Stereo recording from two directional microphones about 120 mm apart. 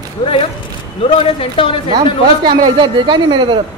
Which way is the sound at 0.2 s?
50° left (ahead or behind).